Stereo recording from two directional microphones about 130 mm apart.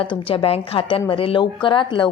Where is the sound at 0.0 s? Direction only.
45° left (ahead or behind).